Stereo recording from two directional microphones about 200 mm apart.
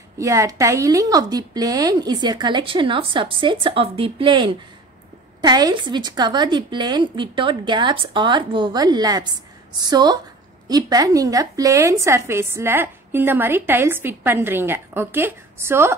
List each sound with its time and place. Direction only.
0.2 s a woman's voice: 15° right (ahead or behind)